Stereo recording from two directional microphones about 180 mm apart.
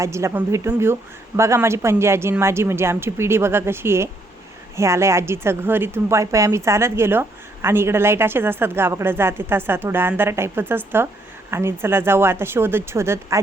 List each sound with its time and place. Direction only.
0.0 s speech: 15° right (ahead or behind)